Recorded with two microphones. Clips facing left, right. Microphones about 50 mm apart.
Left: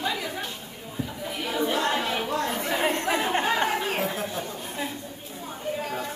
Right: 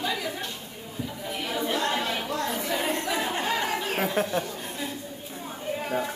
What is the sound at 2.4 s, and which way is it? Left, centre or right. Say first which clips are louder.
Chatter: left 1 dB; left.